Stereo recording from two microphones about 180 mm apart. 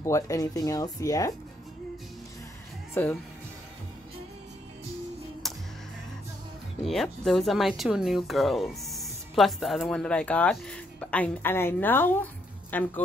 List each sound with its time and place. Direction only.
0.0 s speech: 15° left (ahead or behind)
2.9 s speech: 10° left (ahead or behind)
5.4 s music: centre (ahead or behind)
6.8 s speech: centre (ahead or behind)